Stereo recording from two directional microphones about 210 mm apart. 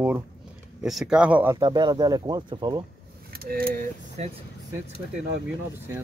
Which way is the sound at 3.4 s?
45° right (ahead or behind).